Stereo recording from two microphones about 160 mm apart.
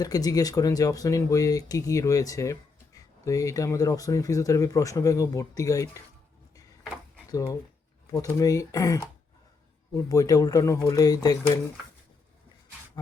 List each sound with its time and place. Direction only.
0.0 s speech: 25° left (ahead or behind)
7.3 s speech: 20° left (ahead or behind)